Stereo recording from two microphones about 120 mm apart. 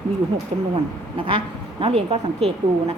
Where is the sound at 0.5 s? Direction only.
60° right (ahead or behind).